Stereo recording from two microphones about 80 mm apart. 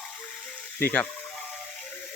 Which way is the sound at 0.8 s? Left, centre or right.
Left.